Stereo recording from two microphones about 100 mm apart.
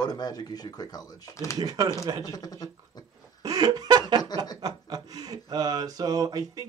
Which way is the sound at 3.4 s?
40° right (ahead or behind).